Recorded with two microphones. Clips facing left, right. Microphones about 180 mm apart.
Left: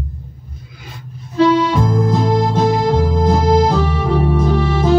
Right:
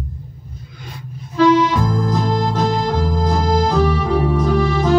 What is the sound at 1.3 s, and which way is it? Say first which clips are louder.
Music: even; 25° left (ahead or behind).